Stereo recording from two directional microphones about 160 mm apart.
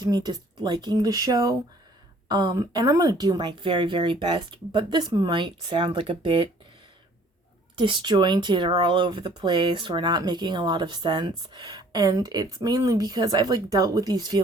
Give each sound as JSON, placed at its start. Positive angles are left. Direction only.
{"t": 0.0, "sound": "speech", "side_deg": -25}
{"t": 7.8, "sound": "speech", "side_deg": -30}